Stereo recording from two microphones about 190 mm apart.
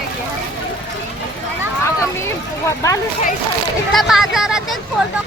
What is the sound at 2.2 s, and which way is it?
Speech, 15° left (ahead or behind).